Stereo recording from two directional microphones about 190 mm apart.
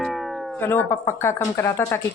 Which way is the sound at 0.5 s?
10° left (ahead or behind).